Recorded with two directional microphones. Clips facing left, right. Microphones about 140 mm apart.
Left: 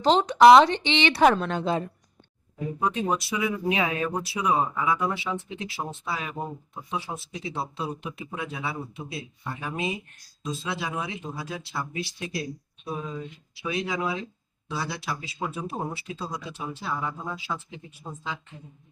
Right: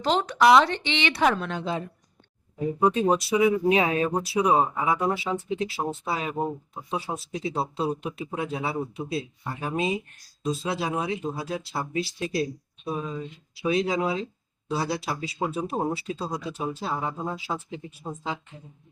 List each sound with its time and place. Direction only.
0.0 s speech: 20° left (ahead or behind)
1.2 s a woman's voice: 45° left (ahead or behind)
2.8 s speech: 30° right (ahead or behind)
7.3 s speech: 35° right (ahead or behind)
13.6 s speech: 35° right (ahead or behind)
15.4 s speech: 25° right (ahead or behind)
16.3 s speech: 40° right (ahead or behind)
16.9 s speech: 25° right (ahead or behind)